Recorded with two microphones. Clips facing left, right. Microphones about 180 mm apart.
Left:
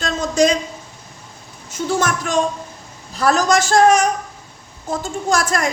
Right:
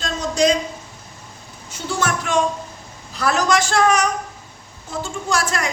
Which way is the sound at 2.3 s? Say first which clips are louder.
Left 1 dB; 45° left (ahead or behind).